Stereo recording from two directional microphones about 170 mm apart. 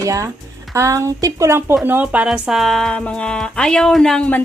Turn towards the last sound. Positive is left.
turn(degrees=5)  # may be behind; listen again after turning